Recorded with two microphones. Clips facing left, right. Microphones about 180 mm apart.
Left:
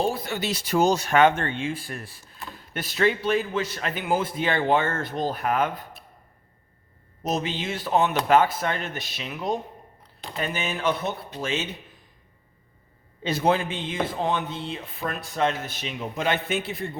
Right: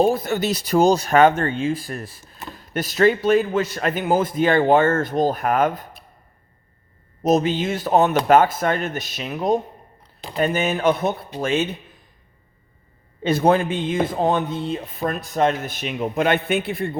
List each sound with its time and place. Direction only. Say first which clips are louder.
0.0 s speech: right 7 dB; 50° right (ahead or behind)
7.2 s speech: right 9 dB; 45° right (ahead or behind)
13.2 s speech: right 6 dB; 50° right (ahead or behind)